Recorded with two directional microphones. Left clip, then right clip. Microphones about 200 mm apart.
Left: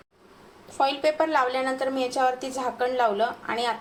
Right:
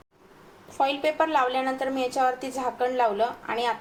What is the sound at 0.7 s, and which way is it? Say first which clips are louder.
A woman's voice: left 1 dB; 5° left (ahead or behind).